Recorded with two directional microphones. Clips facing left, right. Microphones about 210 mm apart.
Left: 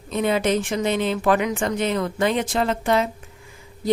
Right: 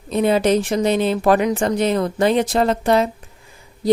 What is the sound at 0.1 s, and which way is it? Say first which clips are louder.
Speech: right 5 dB; 35° right (ahead or behind).